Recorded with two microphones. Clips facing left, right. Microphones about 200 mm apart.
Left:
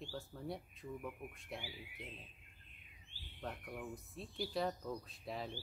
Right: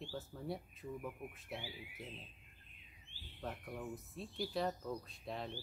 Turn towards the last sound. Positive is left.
turn(degrees=0)  # may be behind; listen again after turning